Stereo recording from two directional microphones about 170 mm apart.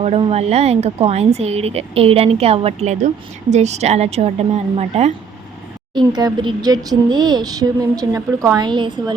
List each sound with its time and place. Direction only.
0.0 s speech: 35° right (ahead or behind)
5.9 s speech: 25° right (ahead or behind)